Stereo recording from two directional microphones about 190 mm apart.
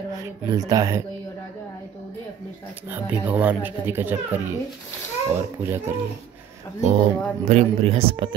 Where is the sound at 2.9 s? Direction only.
10° right (ahead or behind).